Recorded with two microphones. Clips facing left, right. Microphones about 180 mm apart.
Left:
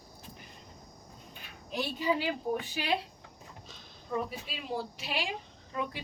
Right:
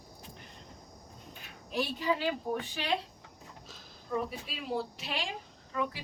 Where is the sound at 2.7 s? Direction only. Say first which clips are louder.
Even; 10° left (ahead or behind).